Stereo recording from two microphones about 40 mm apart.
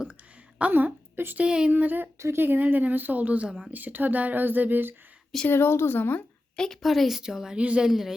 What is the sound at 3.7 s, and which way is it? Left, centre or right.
Speech, right.